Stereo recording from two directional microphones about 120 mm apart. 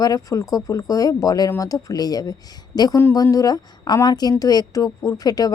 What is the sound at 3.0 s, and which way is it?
A woman's voice, 20° left (ahead or behind).